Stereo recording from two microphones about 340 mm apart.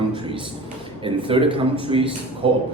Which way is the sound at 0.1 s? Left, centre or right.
Centre.